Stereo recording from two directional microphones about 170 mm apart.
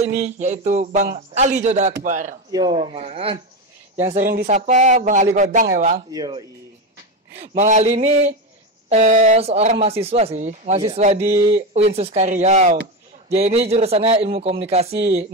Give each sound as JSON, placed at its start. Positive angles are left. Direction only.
{"t": 0.4, "sound": "speech", "side_deg": -45}
{"t": 2.5, "sound": "speech", "side_deg": -25}
{"t": 6.1, "sound": "speech", "side_deg": -20}
{"t": 7.3, "sound": "speech", "side_deg": -45}
{"t": 11.2, "sound": "speech", "side_deg": -15}
{"t": 11.7, "sound": "speech", "side_deg": -35}